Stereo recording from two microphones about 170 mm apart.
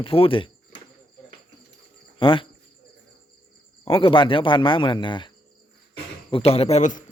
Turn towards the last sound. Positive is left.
turn(degrees=45)  # may be behind; listen again after turning